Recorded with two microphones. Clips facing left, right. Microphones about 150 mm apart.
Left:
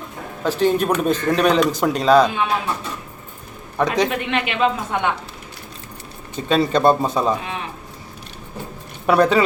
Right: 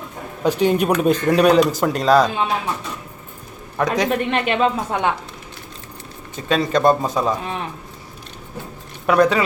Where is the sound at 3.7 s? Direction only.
Centre (ahead or behind).